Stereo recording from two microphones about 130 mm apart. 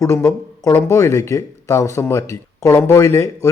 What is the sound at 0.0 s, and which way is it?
A man's voice, 20° left (ahead or behind).